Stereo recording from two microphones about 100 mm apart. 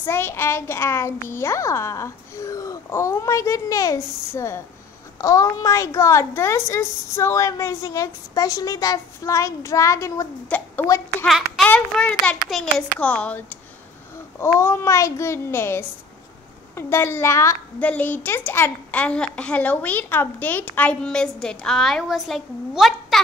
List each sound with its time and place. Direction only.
0.0 s a child's voice: 25° left (ahead or behind)
10.5 s a woman's voice: 15° left (ahead or behind)
11.2 s a child's voice: centre (ahead or behind)
11.6 s a woman's voice: 15° left (ahead or behind)
12.4 s a child's voice: centre (ahead or behind)
13.0 s a woman's voice: 15° left (ahead or behind)
14.4 s a child's voice: 25° left (ahead or behind)
17.7 s a woman's voice: 15° left (ahead or behind); by 23.1 s centre (ahead or behind)